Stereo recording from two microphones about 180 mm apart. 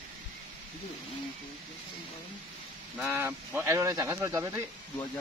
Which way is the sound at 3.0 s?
10° right (ahead or behind).